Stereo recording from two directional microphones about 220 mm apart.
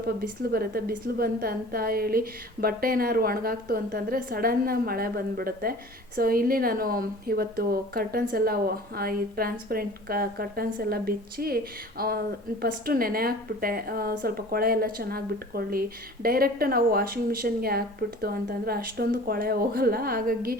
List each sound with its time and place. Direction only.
0.2 s a woman's voice: 45° right (ahead or behind)